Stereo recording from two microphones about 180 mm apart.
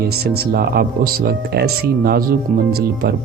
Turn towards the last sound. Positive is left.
turn(degrees=-60)  # may be behind; listen again after turning